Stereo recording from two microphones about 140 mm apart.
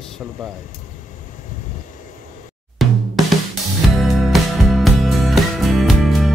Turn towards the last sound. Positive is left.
turn(degrees=0)  # may be behind; listen again after turning